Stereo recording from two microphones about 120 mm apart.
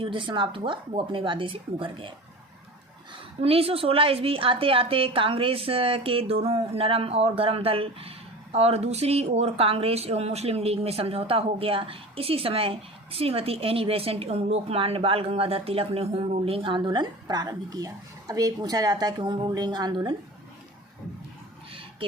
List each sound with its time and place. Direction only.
0.0 s speech: 45° right (ahead or behind)
3.4 s speech: 55° right (ahead or behind); by 20.0 s 40° right (ahead or behind)